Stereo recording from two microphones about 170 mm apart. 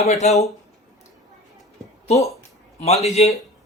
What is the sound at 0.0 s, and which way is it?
Speech, 40° left (ahead or behind).